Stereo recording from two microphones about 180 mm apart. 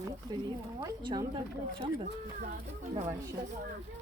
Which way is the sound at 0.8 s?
20° right (ahead or behind).